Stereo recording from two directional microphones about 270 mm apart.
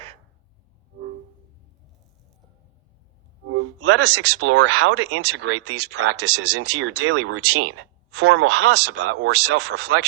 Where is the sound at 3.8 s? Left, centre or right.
Right.